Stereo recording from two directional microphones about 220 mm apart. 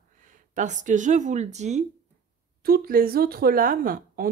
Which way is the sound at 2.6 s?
40° right (ahead or behind).